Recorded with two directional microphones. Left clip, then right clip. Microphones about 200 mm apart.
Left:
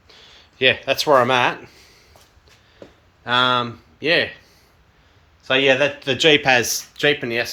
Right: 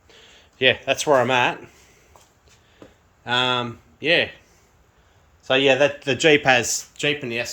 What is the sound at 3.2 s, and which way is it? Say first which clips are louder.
Speech: left 4 dB; 10° right (ahead or behind).